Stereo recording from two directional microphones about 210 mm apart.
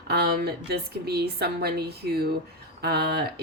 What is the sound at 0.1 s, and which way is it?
A woman's voice, 50° right (ahead or behind).